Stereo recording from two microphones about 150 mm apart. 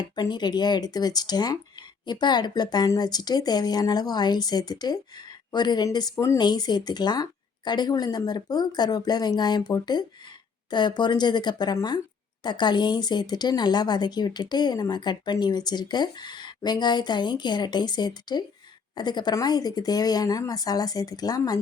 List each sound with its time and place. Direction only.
0.0 s speech: 30° left (ahead or behind)